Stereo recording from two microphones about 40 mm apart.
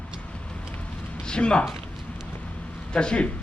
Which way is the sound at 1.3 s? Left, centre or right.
Left.